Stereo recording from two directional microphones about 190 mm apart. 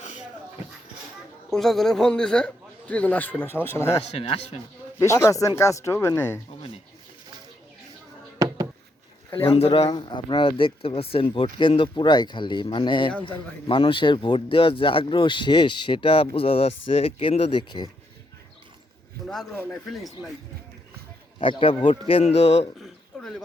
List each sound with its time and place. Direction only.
1.5 s a man's voice: centre (ahead or behind)
3.8 s speech: 35° left (ahead or behind)
4.9 s speech: 15° left (ahead or behind)
8.4 s a sound: 15° right (ahead or behind)
9.3 s a man's voice: 30° left (ahead or behind)
19.3 s a man's voice: centre (ahead or behind)
21.3 s a man's voice: 25° left (ahead or behind)
22.8 s a sound: centre (ahead or behind)